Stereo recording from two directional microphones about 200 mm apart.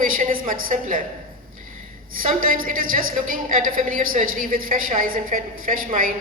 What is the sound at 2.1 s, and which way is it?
A woman's voice, 45° right (ahead or behind).